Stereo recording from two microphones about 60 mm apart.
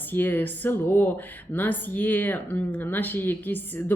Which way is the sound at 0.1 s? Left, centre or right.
Left.